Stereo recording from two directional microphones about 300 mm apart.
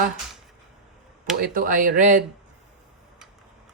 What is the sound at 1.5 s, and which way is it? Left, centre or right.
Speech, right.